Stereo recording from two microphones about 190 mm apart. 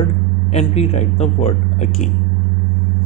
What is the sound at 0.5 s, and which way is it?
Speech, 35° left (ahead or behind).